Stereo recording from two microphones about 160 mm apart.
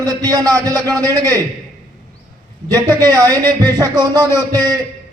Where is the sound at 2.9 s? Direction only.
20° right (ahead or behind).